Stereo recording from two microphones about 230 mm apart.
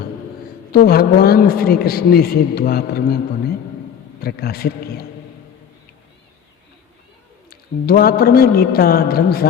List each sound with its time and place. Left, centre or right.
0.7 s a man's voice: left
4.2 s a man's voice: left
7.5 s a man's voice: left